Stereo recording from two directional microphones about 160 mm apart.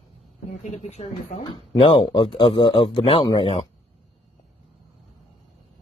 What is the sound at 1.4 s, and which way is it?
Speech, 30° left (ahead or behind).